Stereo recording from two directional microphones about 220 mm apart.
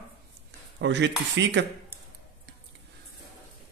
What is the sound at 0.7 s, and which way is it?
Speech, 55° right (ahead or behind).